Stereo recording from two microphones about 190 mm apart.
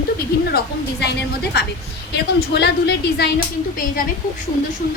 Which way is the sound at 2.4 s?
60° left (ahead or behind).